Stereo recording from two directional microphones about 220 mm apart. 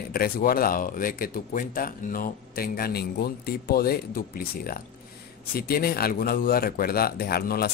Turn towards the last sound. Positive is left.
turn(degrees=45)  # may be behind; listen again after turning